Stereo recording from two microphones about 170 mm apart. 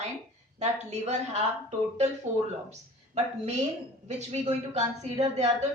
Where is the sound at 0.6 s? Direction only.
40° right (ahead or behind).